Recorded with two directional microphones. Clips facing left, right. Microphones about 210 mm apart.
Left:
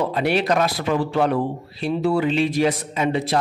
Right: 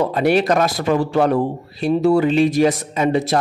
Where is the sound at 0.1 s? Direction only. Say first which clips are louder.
Right 4 dB; 45° right (ahead or behind).